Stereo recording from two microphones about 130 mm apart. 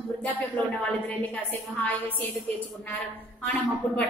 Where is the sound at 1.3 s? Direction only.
15° left (ahead or behind).